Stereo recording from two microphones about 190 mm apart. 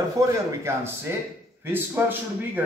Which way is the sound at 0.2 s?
15° right (ahead or behind).